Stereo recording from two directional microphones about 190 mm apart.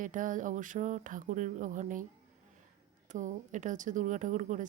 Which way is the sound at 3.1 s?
40° right (ahead or behind).